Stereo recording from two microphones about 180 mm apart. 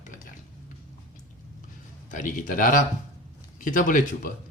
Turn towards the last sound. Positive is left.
turn(degrees=45)  # may be behind; listen again after turning